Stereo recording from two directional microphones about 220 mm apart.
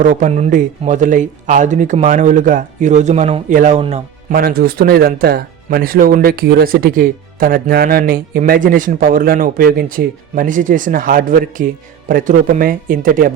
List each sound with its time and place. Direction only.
0.0 s speech: 35° right (ahead or behind)